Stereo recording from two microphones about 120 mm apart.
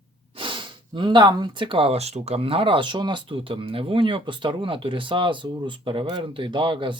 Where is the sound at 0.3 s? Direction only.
45° right (ahead or behind).